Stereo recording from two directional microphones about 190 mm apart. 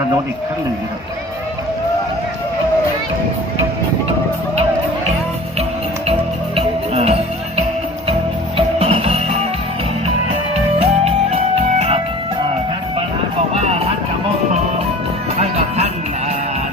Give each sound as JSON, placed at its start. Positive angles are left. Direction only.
{"t": 6.6, "sound": "music", "side_deg": -30}
{"t": 10.5, "sound": "music", "side_deg": -35}
{"t": 13.5, "sound": "music", "side_deg": -35}
{"t": 15.4, "sound": "music", "side_deg": -35}